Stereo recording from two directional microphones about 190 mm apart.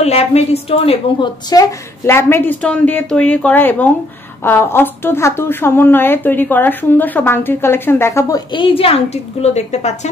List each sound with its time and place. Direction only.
0.0 s a woman's voice: 35° left (ahead or behind)
1.5 s speech: 15° left (ahead or behind); by 9.9 s 35° left (ahead or behind)